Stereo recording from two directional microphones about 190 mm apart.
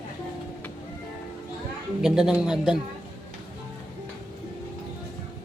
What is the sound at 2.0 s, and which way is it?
Speech, 5° right (ahead or behind).